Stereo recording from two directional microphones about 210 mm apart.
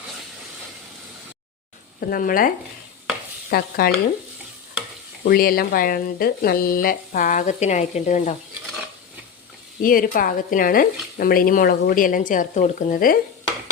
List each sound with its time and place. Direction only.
2.0 s speech: 45° left (ahead or behind)
3.5 s speech: 45° left (ahead or behind)
5.2 s speech: 45° left (ahead or behind)
9.8 s speech: 40° left (ahead or behind)